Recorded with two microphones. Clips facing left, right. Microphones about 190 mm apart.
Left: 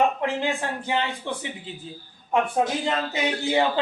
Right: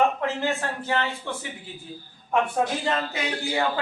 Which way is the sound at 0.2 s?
15° left (ahead or behind).